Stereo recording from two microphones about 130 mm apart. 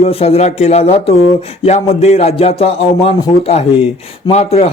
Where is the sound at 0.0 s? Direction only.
50° left (ahead or behind).